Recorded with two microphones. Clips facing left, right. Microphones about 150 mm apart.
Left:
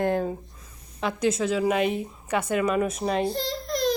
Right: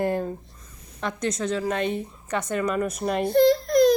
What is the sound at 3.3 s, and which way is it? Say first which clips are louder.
Baby cry: right 12 dB; 55° right (ahead or behind).